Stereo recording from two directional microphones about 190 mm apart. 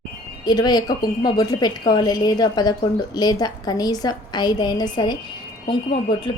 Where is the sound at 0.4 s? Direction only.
20° left (ahead or behind).